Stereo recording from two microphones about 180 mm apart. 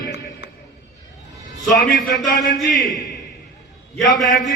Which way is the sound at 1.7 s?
50° left (ahead or behind).